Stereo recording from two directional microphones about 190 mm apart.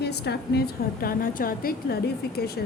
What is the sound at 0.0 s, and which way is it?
Speech, 60° left (ahead or behind).